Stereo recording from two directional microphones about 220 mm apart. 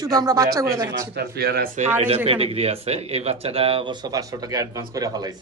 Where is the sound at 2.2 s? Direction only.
25° right (ahead or behind).